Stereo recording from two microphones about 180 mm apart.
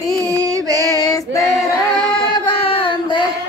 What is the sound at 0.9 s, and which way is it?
Female singing, 20° left (ahead or behind).